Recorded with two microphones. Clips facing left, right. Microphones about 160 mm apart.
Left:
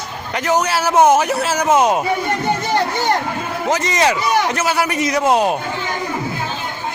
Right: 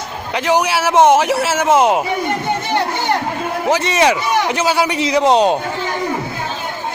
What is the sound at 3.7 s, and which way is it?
Speech, 10° right (ahead or behind).